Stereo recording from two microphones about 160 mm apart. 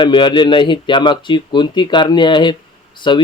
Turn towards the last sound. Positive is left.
turn(degrees=30)  # may be behind; listen again after turning